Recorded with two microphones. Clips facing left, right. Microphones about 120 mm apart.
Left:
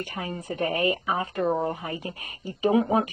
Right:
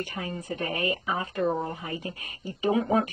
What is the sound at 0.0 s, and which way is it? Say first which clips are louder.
Speech: left 1 dB; 35° left (ahead or behind).